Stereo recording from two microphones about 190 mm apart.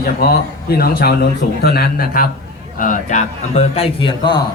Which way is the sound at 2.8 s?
40° left (ahead or behind).